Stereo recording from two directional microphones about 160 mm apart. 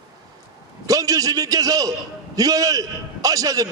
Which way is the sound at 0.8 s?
20° right (ahead or behind).